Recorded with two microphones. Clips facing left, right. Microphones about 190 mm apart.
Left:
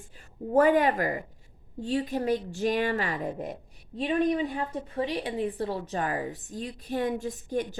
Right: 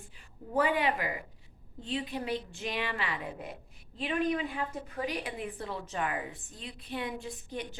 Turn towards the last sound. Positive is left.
turn(degrees=45)  # may be behind; listen again after turning